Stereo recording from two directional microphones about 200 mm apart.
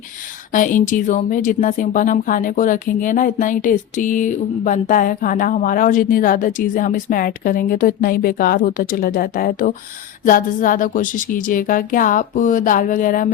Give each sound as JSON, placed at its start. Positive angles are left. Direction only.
{"t": 0.5, "sound": "a woman's voice", "side_deg": 40}